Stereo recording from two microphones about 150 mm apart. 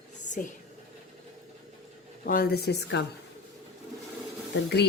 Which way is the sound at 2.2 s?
80° left.